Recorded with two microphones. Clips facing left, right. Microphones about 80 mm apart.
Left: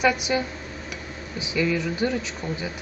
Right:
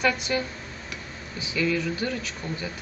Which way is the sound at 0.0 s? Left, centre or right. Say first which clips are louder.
Left 3 dB; centre.